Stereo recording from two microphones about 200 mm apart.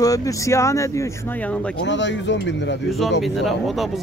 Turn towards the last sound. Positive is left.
turn(degrees=0)  # may be behind; listen again after turning